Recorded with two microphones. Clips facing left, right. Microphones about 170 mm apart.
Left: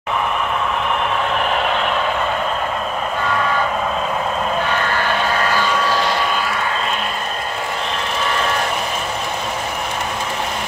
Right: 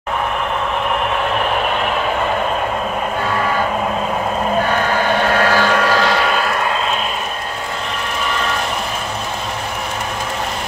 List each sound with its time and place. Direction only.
4.9 s vehicle: 55° right (ahead or behind); by 6.4 s 80° right